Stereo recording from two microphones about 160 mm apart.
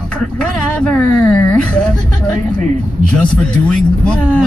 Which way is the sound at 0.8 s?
5° left (ahead or behind).